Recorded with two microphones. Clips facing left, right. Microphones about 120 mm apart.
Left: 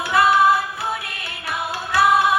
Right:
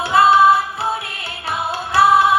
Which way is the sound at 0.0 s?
25° right (ahead or behind).